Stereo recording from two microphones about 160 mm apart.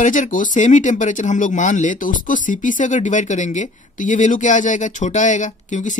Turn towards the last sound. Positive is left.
turn(degrees=50)  # may be behind; listen again after turning